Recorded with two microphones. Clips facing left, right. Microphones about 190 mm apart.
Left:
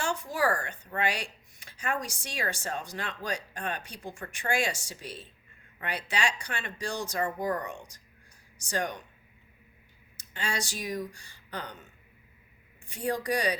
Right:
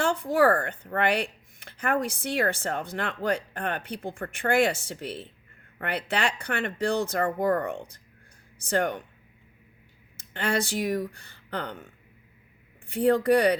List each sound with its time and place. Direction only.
0.0 s speech: 55° right (ahead or behind)
10.2 s speech: 55° right (ahead or behind)
12.9 s speech: 55° right (ahead or behind)